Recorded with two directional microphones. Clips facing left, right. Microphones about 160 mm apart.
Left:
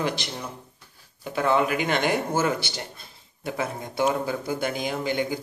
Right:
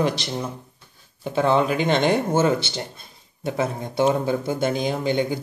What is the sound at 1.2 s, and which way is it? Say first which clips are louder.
Speech: right 3 dB; 25° right (ahead or behind).